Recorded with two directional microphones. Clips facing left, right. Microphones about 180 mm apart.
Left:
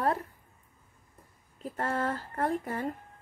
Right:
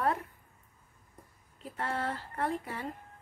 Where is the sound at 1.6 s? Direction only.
45° left (ahead or behind).